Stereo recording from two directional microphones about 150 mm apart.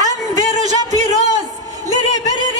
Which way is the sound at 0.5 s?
50° right (ahead or behind).